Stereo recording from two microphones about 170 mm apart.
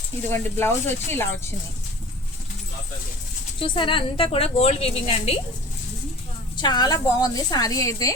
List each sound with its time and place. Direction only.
0.3 s speech: 15° left (ahead or behind)
3.6 s a woman's voice: 30° left (ahead or behind)
6.6 s a woman's voice: 25° left (ahead or behind)